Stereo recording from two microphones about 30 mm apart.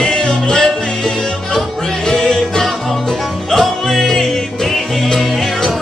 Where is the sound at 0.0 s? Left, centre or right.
Left.